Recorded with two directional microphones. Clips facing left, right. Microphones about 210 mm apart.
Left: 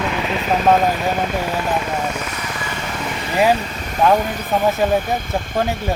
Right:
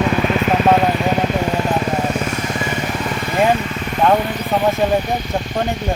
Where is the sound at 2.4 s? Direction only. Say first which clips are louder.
Right 6 dB; 25° right (ahead or behind).